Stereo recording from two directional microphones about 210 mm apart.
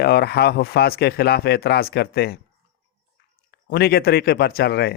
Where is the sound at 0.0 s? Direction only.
50° left (ahead or behind).